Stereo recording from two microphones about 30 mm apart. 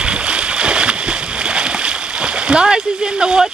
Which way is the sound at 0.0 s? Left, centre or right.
Right.